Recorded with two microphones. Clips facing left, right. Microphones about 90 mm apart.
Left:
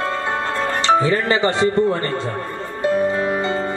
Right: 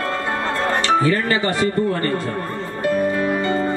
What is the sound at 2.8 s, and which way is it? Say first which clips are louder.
Music: left 1 dB; 25° left (ahead or behind).